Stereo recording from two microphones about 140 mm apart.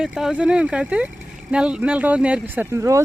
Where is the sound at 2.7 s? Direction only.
20° right (ahead or behind).